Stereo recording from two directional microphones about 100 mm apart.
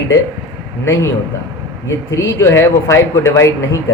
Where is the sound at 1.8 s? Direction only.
30° left (ahead or behind).